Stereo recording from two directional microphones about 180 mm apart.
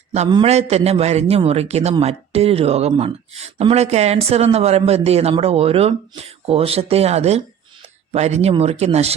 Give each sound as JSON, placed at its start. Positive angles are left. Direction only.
{"t": 0.3, "sound": "a man's voice", "side_deg": -25}
{"t": 0.5, "sound": "a man's voice", "side_deg": -35}